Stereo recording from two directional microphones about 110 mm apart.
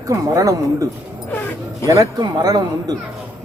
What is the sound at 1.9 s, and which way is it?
Speech, 35° right (ahead or behind).